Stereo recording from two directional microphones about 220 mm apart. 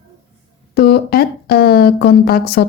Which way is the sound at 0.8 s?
45° left (ahead or behind).